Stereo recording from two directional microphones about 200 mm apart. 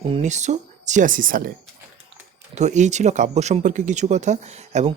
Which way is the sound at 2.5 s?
35° right (ahead or behind).